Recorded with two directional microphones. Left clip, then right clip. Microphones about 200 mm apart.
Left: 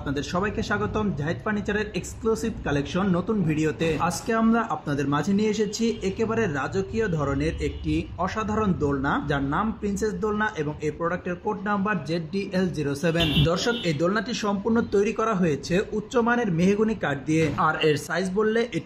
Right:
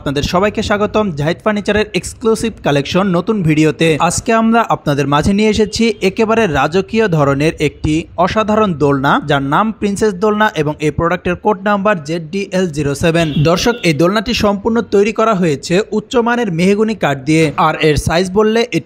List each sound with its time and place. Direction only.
0.1 s speech: 40° right (ahead or behind)